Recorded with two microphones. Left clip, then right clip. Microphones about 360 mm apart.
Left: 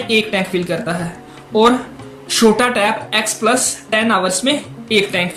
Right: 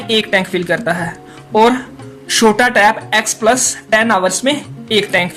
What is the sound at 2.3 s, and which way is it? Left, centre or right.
A woman's voice, right.